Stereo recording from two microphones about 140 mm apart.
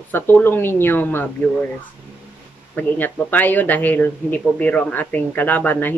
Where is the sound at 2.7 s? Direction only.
15° left (ahead or behind).